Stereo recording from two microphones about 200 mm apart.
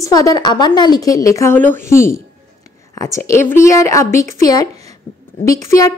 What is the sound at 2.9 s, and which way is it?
A woman's voice, 15° left (ahead or behind).